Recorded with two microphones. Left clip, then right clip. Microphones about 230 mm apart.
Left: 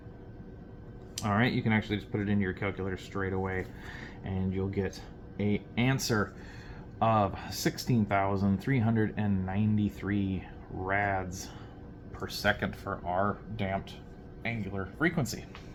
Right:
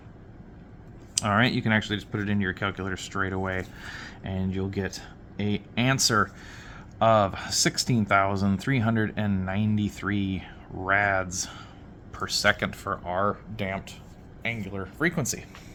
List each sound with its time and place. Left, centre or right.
1.1 s speech: right